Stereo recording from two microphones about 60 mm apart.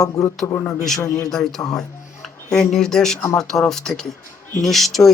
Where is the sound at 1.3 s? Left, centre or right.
Centre.